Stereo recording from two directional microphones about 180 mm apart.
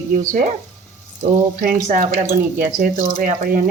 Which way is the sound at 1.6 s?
50° right (ahead or behind).